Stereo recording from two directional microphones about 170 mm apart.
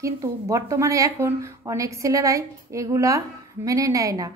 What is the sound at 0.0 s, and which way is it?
A woman's voice, 15° right (ahead or behind).